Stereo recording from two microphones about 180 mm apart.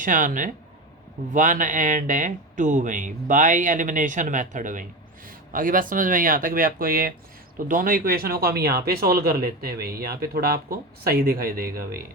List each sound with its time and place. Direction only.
0.0 s speech: 45° right (ahead or behind)